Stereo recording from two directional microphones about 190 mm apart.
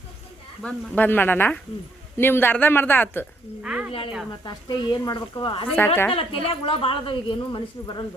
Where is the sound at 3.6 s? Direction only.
5° right (ahead or behind).